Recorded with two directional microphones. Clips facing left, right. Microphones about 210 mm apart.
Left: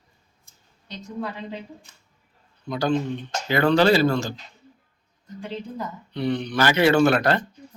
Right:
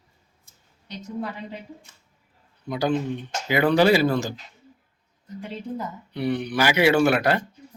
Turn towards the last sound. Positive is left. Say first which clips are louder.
# left 1 dB
turn(degrees=-10)  # may be behind; listen again after turning